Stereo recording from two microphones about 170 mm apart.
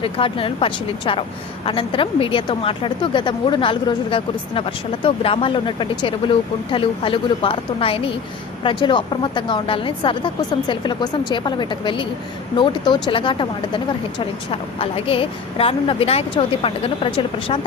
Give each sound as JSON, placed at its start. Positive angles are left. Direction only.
{"t": 0.0, "sound": "a woman's voice", "side_deg": 30}